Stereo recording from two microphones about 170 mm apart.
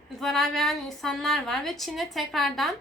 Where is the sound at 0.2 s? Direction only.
Centre (ahead or behind).